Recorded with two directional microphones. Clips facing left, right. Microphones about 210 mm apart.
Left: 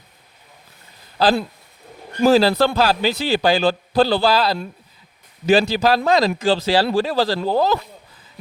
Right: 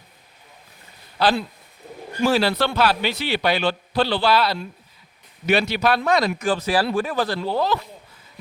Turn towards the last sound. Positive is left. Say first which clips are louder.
# left 4 dB
turn(degrees=40)  # may be behind; listen again after turning